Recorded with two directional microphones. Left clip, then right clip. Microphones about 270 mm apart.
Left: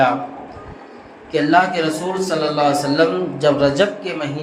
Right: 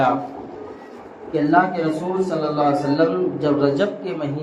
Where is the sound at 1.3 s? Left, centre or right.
Left.